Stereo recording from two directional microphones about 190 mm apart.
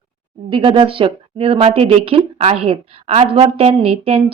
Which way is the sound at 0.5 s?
25° right (ahead or behind).